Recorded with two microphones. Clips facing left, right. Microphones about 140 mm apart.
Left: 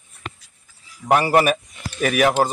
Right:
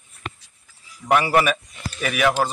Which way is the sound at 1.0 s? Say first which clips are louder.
Left 2 dB; 35° left (ahead or behind).